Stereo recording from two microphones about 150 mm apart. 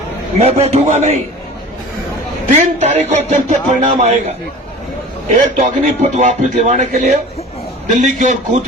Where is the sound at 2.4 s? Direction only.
55° right (ahead or behind).